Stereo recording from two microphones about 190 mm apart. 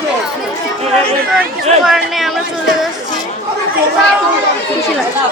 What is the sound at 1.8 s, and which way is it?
A woman's voice, centre (ahead or behind).